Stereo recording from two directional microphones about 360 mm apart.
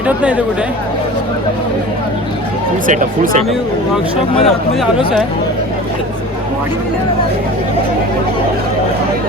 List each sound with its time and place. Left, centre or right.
0.2 s speech: centre
2.8 s speech: right
4.4 s speech: centre